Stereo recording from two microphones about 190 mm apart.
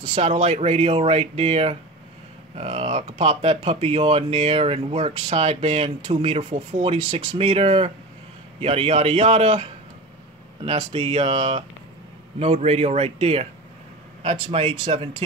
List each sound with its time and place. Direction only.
0.0 s speech: 30° right (ahead or behind)